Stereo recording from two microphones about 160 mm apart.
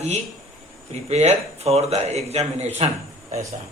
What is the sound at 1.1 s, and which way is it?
Speech, 45° right (ahead or behind).